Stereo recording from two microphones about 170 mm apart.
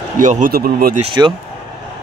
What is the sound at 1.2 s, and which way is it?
Speech, 20° right (ahead or behind).